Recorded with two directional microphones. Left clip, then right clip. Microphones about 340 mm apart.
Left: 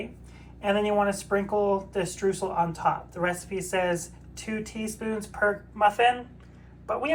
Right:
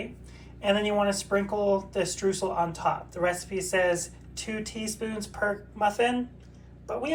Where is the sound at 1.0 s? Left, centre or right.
Centre.